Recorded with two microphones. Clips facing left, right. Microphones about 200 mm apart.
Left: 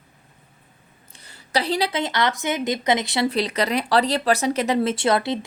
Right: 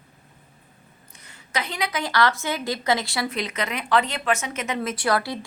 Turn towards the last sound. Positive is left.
turn(degrees=20)  # may be behind; listen again after turning